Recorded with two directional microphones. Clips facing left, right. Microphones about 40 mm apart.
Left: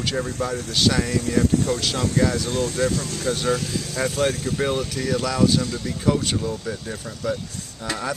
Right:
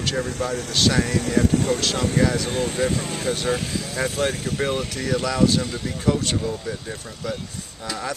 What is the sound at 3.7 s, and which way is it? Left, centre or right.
Speech, centre.